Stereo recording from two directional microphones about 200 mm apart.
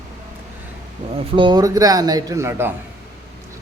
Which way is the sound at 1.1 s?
25° right (ahead or behind).